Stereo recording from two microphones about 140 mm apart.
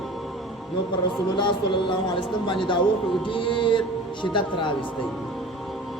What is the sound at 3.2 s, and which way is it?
A man's voice, 35° left (ahead or behind).